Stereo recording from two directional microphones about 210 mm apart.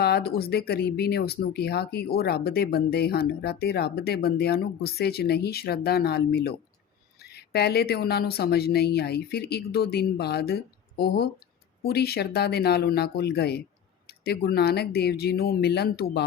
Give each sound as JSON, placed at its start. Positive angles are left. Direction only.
{"t": 0.0, "sound": "speech", "side_deg": 50}